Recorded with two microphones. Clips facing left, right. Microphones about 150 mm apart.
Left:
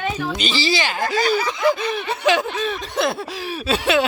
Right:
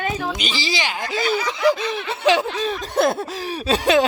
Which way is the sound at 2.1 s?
30° right (ahead or behind).